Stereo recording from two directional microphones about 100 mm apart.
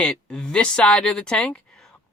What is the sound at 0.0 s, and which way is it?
Speech, 10° left (ahead or behind).